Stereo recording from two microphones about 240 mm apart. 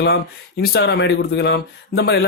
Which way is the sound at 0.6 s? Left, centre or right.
Left.